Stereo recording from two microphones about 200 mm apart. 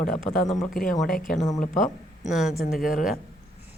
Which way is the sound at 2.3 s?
Centre (ahead or behind).